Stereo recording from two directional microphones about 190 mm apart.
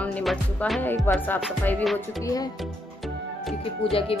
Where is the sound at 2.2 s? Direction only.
20° left (ahead or behind).